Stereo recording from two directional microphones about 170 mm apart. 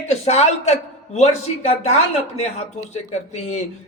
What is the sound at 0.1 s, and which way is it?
A man's voice, 40° left (ahead or behind).